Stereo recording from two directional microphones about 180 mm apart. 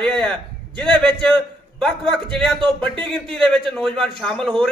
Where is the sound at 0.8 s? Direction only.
25° right (ahead or behind).